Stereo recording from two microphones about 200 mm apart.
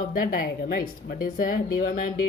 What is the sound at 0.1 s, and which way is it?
A woman's voice, 45° left (ahead or behind).